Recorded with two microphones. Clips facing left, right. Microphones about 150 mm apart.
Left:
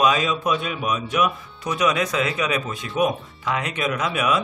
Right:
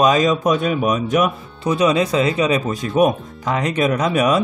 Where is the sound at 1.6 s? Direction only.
30° right (ahead or behind).